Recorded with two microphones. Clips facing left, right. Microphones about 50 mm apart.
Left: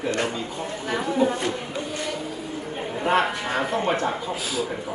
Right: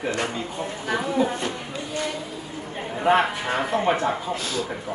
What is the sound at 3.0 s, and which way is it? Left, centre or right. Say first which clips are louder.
A woman's voice: right 2 dB; centre.